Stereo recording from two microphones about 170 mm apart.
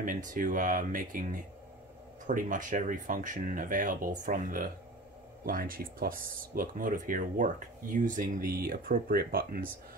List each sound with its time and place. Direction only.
0.0 s speech: 50° right (ahead or behind)